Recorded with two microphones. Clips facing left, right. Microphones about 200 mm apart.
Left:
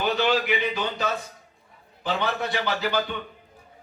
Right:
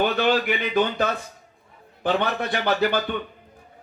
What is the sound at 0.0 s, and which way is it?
A man's voice, 55° right (ahead or behind).